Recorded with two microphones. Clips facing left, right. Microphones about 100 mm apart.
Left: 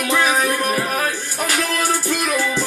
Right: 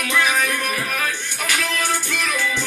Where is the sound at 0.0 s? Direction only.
35° left (ahead or behind).